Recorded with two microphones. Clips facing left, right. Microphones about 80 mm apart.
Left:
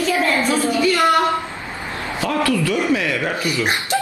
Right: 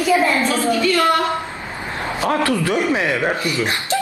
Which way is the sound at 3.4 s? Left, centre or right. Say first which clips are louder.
Even; centre.